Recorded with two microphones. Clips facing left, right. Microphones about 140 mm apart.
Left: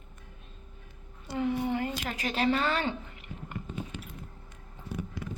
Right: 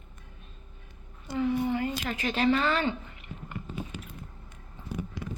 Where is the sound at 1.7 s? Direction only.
45° left (ahead or behind).